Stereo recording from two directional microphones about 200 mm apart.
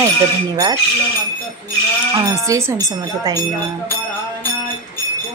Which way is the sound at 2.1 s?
15° right (ahead or behind).